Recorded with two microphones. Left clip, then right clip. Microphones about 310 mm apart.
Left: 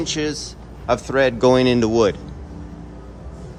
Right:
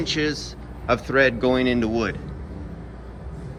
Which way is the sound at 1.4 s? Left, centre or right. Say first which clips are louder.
Left 6 dB; left.